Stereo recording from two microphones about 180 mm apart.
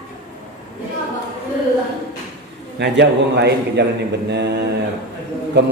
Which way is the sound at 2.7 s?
75° right (ahead or behind).